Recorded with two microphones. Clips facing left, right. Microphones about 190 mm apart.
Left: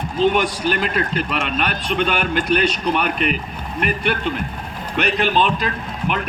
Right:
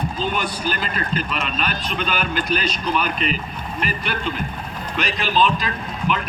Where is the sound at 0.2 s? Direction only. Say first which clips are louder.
Left 11 dB; 80° left.